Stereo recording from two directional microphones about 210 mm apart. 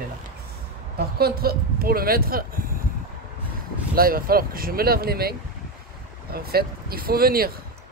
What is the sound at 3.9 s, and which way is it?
Speech, 45° right (ahead or behind).